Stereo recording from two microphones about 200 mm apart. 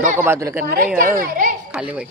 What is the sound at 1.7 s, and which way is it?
Speech, 5° right (ahead or behind).